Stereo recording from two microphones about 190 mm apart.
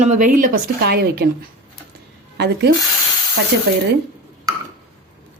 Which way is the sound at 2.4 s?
60° right (ahead or behind).